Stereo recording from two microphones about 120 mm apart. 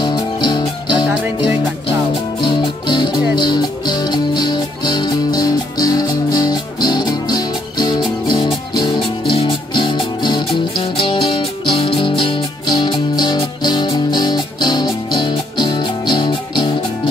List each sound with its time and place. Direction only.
0.0 s music: 40° left (ahead or behind)
2.4 s music: 40° left (ahead or behind)